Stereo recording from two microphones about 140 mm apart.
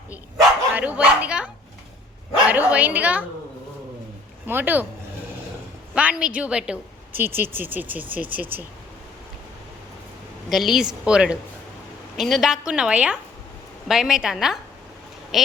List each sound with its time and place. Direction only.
0.7 s speech: 10° right (ahead or behind)
2.5 s a woman's voice: 10° right (ahead or behind)
4.4 s a woman's voice: 15° right (ahead or behind)
5.9 s a woman's voice: 10° right (ahead or behind)
10.5 s a woman's voice: centre (ahead or behind)